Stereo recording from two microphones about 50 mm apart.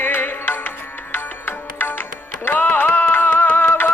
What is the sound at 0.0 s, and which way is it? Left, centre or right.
Music, left.